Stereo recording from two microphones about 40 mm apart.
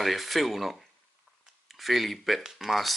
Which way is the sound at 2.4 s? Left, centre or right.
Centre.